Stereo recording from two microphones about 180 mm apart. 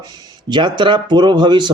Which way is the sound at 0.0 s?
20° right (ahead or behind).